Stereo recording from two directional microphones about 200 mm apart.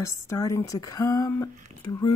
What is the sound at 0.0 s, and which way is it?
Speech, 15° left (ahead or behind).